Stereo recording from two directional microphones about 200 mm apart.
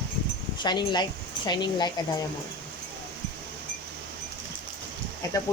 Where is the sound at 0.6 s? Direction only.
20° left (ahead or behind).